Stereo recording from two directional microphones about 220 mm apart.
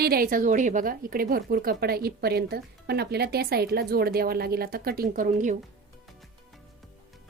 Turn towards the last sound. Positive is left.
turn(degrees=-35)  # may be behind; listen again after turning